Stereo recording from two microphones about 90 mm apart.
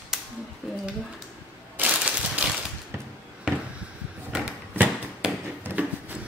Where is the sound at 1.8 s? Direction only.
15° right (ahead or behind).